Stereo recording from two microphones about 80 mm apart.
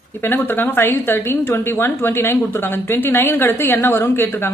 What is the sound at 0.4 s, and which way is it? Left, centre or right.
A woman's voice, left.